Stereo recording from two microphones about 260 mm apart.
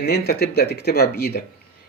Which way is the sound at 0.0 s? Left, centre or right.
Left.